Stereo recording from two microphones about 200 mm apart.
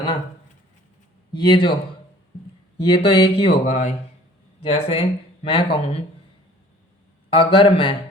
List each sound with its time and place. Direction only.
1.3 s speech: 25° left (ahead or behind)
2.8 s speech: 30° left (ahead or behind)
7.3 s speech: 25° left (ahead or behind)